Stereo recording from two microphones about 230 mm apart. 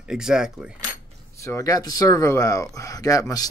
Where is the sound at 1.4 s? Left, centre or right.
Centre.